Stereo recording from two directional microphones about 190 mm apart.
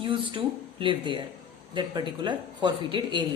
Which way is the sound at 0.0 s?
25° right (ahead or behind).